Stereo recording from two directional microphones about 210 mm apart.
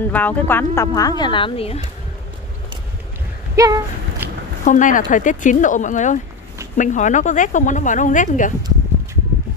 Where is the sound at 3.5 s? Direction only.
15° right (ahead or behind).